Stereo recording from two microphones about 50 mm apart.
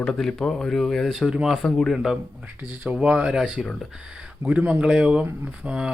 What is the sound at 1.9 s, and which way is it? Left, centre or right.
Speech, centre.